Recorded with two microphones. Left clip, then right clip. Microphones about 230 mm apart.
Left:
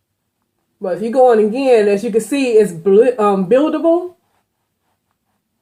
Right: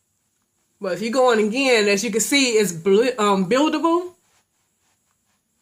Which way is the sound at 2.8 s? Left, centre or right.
Right.